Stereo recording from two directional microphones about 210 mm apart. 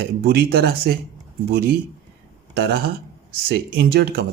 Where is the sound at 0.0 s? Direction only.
50° right (ahead or behind).